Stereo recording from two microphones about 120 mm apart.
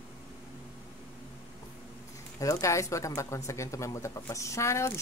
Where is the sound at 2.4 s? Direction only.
25° left (ahead or behind).